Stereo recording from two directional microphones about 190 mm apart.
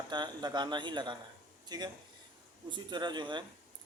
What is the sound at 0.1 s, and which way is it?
Speech, 20° right (ahead or behind).